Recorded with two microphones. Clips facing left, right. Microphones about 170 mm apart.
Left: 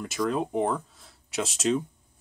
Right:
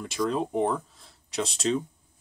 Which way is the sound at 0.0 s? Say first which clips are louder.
Even; 5° left (ahead or behind).